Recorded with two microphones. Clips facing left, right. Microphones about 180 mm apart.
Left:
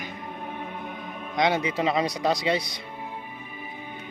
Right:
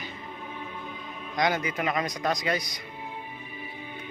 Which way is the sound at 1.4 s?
25° left (ahead or behind).